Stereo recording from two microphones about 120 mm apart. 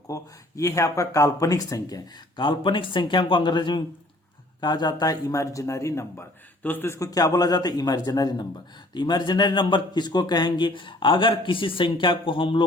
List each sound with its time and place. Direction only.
0.1 s speech: 25° left (ahead or behind); by 12.6 s 45° left (ahead or behind)